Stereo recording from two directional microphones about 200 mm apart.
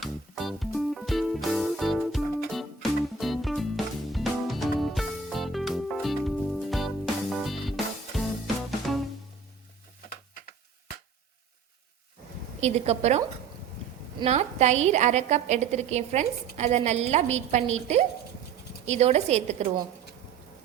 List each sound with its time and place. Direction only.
0.0 s music: centre (ahead or behind)
12.5 s a woman's voice: 35° right (ahead or behind)